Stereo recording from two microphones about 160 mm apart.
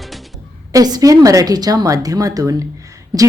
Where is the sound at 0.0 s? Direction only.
Centre (ahead or behind).